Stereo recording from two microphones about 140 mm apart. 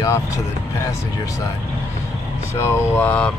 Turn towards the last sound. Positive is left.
turn(degrees=10)  # may be behind; listen again after turning